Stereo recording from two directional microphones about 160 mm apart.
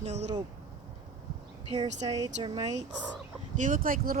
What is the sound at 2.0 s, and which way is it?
Speech, 25° right (ahead or behind).